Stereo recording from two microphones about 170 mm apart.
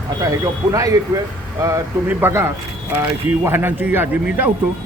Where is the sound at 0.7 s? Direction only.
20° right (ahead or behind).